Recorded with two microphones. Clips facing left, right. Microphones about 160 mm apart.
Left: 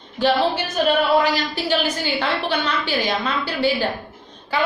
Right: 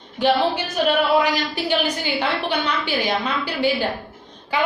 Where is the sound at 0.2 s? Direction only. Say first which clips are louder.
Even; 15° right (ahead or behind).